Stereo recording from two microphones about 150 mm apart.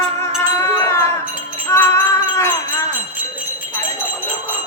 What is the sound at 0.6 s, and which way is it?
Sheep, 20° left (ahead or behind).